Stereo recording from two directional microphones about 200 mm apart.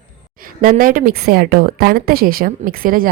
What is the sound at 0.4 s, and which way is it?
A woman's voice, 40° right (ahead or behind).